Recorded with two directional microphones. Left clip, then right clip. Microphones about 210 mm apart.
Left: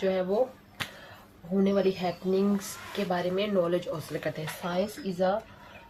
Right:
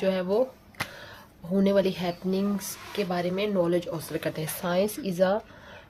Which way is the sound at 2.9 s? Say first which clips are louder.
Even; 30° right (ahead or behind).